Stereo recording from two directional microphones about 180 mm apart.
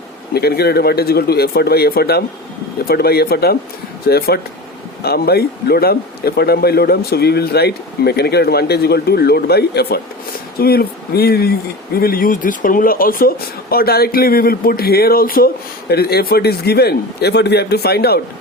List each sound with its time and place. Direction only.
0.3 s speech: 60° left (ahead or behind)